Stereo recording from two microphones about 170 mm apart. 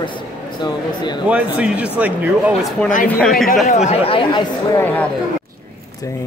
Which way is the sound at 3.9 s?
30° left (ahead or behind).